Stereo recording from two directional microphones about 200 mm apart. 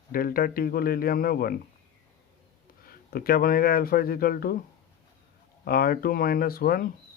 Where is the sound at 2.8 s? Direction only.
50° left (ahead or behind).